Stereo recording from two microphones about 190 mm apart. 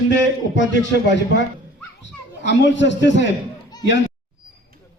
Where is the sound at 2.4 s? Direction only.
65° left (ahead or behind).